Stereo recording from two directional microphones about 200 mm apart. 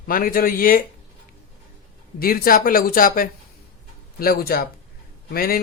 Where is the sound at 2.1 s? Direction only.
45° left (ahead or behind).